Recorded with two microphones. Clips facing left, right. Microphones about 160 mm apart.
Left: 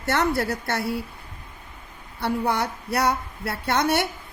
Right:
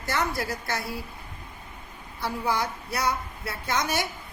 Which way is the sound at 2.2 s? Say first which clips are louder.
Left 4 dB; 65° left (ahead or behind).